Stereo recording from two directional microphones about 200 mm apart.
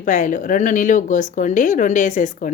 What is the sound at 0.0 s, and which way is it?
Speech, 40° left (ahead or behind).